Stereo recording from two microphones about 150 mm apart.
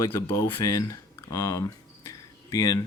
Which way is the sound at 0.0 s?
20° left (ahead or behind).